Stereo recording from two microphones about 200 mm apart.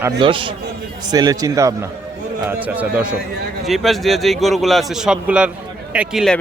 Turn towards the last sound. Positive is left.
turn(degrees=0)  # may be behind; listen again after turning